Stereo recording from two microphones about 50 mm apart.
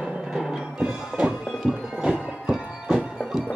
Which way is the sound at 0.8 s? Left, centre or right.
Right.